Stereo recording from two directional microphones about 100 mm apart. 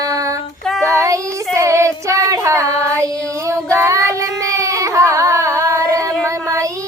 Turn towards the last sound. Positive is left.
turn(degrees=-30)  # may be behind; listen again after turning